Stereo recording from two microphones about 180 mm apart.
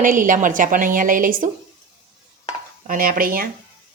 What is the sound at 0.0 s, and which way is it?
A woman's voice, 45° right (ahead or behind).